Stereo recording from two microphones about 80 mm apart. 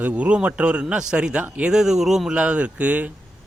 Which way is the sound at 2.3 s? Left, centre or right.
Centre.